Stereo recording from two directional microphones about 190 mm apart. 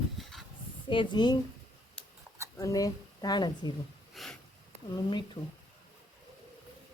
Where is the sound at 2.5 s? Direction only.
20° left (ahead or behind).